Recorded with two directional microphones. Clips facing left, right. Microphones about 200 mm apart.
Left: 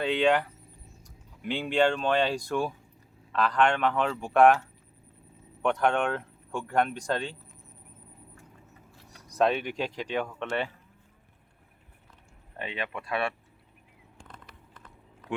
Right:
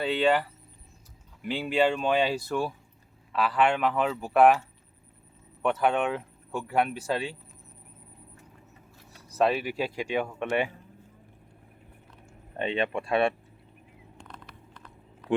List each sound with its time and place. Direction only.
0.0 s speech: centre (ahead or behind)
5.6 s speech: 5° right (ahead or behind)
9.1 s speech: 5° right (ahead or behind)
12.5 s speech: 25° right (ahead or behind)